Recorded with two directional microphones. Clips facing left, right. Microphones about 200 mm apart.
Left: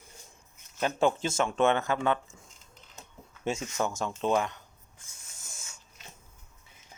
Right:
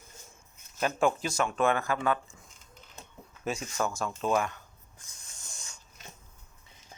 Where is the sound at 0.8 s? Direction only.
20° left (ahead or behind).